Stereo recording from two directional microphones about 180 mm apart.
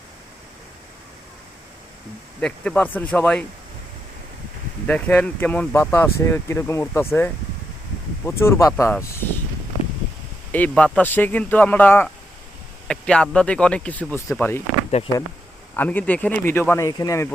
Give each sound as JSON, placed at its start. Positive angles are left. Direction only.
{"t": 2.4, "sound": "speech", "side_deg": 5}
{"t": 4.9, "sound": "speech", "side_deg": 10}
{"t": 10.5, "sound": "speech", "side_deg": 10}
{"t": 14.8, "sound": "speech", "side_deg": 35}
{"t": 15.7, "sound": "speech", "side_deg": 10}